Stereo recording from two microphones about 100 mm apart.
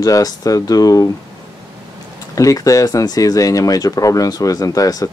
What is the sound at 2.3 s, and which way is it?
Speech, 35° left (ahead or behind).